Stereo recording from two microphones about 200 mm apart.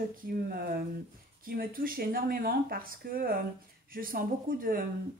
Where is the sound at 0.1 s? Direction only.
50° right (ahead or behind).